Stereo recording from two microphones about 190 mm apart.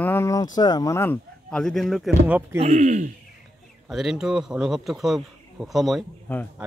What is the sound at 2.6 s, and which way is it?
Speech, 35° right (ahead or behind).